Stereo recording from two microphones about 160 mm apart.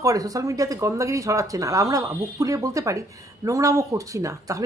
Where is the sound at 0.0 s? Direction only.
20° right (ahead or behind).